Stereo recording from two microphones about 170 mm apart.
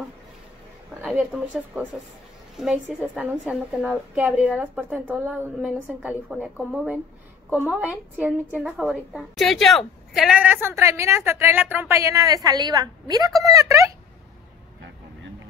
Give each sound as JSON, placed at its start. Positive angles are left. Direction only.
{"t": 1.0, "sound": "a woman's voice", "side_deg": -5}